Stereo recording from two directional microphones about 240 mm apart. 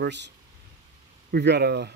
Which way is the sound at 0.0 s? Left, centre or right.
Right.